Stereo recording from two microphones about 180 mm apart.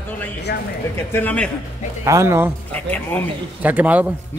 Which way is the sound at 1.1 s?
10° left (ahead or behind).